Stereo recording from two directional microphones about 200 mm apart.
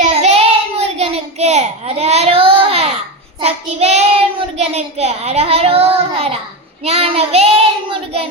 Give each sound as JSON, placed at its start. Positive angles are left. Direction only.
{"t": 0.0, "sound": "child singing", "side_deg": -35}